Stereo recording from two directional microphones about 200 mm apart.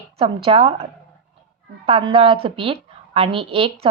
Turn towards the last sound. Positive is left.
turn(degrees=-25)  # may be behind; listen again after turning